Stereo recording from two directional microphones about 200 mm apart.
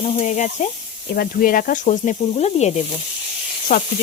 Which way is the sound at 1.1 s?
45° left (ahead or behind).